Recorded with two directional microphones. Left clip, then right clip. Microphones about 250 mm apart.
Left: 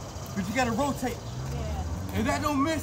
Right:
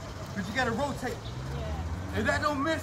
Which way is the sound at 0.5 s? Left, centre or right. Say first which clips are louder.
Left 2 dB; centre.